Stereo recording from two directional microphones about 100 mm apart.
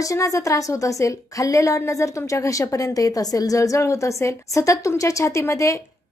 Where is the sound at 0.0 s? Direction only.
35° left (ahead or behind).